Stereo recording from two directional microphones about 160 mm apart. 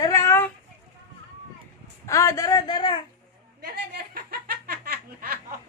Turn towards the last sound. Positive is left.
turn(degrees=-70)  # may be behind; listen again after turning